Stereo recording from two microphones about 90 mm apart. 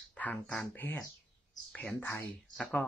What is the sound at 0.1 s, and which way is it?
Speech, 15° left (ahead or behind).